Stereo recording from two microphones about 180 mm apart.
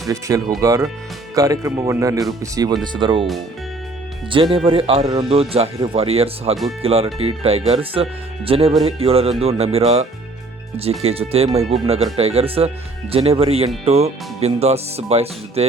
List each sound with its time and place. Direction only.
0.1 s speech: 20° right (ahead or behind)
4.5 s speech: 30° right (ahead or behind)